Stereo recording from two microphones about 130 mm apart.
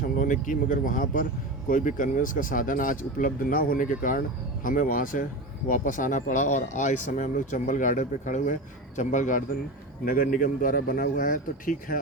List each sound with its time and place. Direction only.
0.2 s speech: 90° left; by 9.4 s 75° left (ahead or behind)
10.0 s speech: 90° left